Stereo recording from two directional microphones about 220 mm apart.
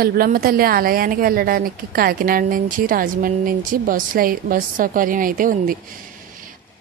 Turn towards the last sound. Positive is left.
turn(degrees=-40)  # may be behind; listen again after turning